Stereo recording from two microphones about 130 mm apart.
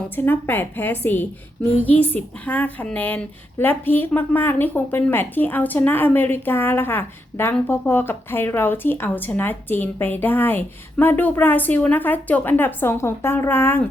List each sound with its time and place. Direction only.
0.2 s speech: 15° left (ahead or behind)